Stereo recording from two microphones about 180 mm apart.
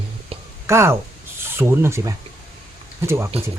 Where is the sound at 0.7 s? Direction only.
15° right (ahead or behind).